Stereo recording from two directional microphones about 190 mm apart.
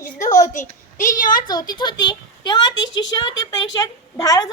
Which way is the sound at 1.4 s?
20° left (ahead or behind).